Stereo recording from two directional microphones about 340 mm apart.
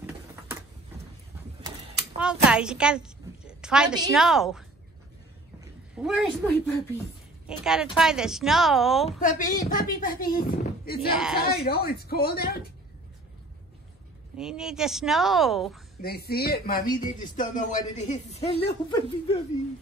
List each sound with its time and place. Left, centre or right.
0.0 s a sound: centre
2.1 s a woman's voice: centre
9.2 s speech: left
11.1 s speech: centre
11.4 s speech: left
14.3 s speech: centre
16.0 s speech: left